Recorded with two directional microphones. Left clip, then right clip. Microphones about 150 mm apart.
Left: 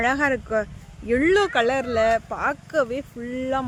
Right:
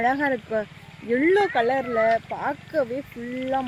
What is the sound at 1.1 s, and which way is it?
Speech, 20° left (ahead or behind).